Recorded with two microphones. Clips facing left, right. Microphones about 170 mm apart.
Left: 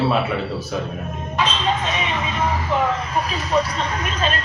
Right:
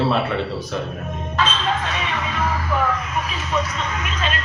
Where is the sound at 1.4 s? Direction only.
15° left (ahead or behind).